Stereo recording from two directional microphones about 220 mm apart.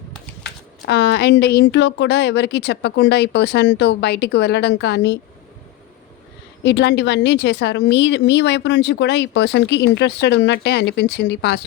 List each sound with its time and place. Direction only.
0.9 s a woman's voice: 50° left (ahead or behind)
6.6 s a woman's voice: 50° left (ahead or behind)